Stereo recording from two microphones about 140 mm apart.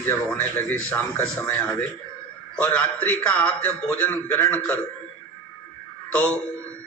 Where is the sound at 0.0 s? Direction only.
15° left (ahead or behind).